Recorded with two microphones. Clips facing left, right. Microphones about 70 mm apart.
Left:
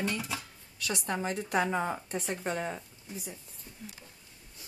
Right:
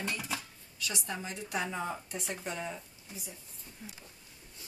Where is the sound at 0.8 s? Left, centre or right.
Left.